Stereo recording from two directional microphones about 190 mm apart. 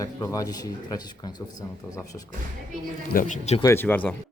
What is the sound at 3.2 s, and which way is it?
Speech, 40° left (ahead or behind).